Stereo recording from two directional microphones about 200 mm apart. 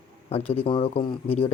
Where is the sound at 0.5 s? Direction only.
25° left (ahead or behind).